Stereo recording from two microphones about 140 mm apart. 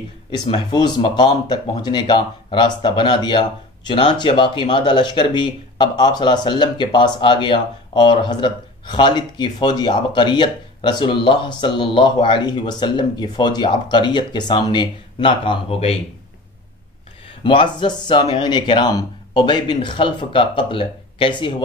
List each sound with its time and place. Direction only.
0.3 s speech: 35° left (ahead or behind)
17.4 s speech: 35° left (ahead or behind)